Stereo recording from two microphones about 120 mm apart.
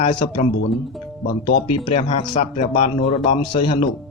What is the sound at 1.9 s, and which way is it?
Speech, 65° left (ahead or behind).